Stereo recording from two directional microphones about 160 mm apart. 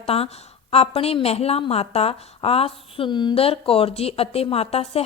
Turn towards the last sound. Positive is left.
turn(degrees=40)  # may be behind; listen again after turning